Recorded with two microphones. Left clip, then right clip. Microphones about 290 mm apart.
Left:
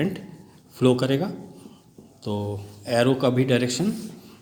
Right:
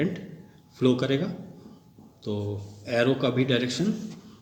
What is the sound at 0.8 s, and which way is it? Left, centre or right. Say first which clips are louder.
Speech: left 3 dB; left.